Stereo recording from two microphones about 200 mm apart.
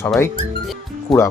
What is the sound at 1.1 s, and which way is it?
Speech, centre (ahead or behind).